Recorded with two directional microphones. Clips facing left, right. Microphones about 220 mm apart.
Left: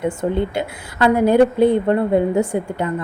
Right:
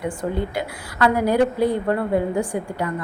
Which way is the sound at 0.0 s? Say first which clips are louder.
Left 5 dB; 25° left (ahead or behind).